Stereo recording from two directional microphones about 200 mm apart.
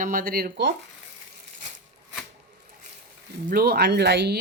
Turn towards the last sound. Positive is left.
turn(degrees=-55)  # may be behind; listen again after turning